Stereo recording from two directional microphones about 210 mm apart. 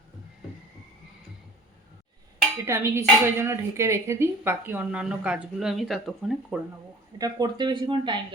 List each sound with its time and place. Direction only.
2.6 s a woman's voice: 10° right (ahead or behind)
7.2 s speech: 20° right (ahead or behind)